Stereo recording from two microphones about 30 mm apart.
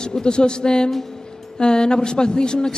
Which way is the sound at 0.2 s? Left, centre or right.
Left.